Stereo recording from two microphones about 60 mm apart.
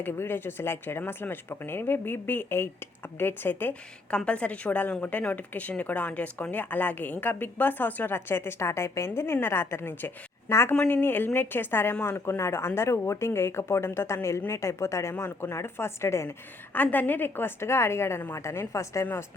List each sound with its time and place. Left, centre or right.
0.0 s speech: left
4.3 s speech: left
10.8 s speech: left
15.1 s speech: left
16.7 s a woman's voice: left